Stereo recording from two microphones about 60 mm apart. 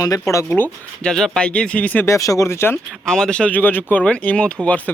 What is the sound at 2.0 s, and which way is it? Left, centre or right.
Speech, left.